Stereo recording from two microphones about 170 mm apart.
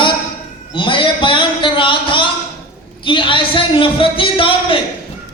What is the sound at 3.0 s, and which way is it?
Speech, 30° left (ahead or behind).